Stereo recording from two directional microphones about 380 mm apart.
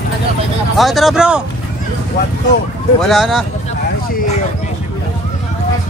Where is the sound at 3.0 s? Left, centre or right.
Centre.